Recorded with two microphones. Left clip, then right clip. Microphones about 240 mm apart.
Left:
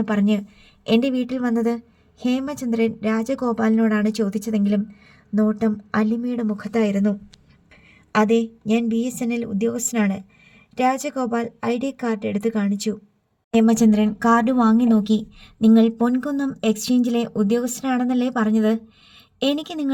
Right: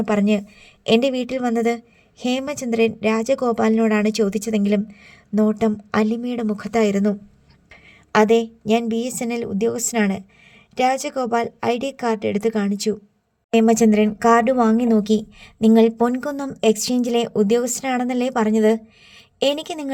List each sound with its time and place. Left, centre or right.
0.0 s a woman's voice: centre